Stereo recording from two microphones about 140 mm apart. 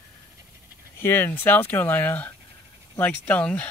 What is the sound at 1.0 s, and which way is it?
Speech, 15° left (ahead or behind).